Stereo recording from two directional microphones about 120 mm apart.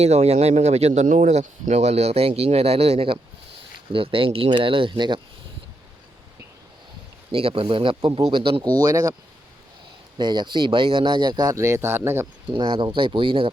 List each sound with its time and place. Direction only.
0.0 s speech: 65° right (ahead or behind); by 5.2 s 40° right (ahead or behind)
7.3 s speech: 50° right (ahead or behind)
8.7 s speech: 30° right (ahead or behind)
10.2 s speech: 40° right (ahead or behind); by 12.3 s 20° right (ahead or behind)
12.5 s speech: 40° right (ahead or behind)